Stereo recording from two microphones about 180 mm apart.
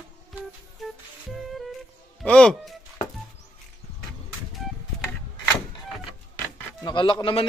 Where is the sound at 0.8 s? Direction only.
Centre (ahead or behind).